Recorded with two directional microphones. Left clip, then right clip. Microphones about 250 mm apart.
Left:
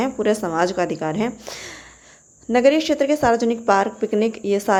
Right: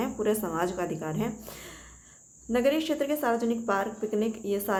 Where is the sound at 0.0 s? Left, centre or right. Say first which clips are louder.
Left 8 dB; left.